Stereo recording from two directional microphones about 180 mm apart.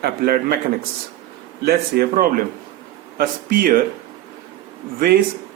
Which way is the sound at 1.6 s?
60° right (ahead or behind).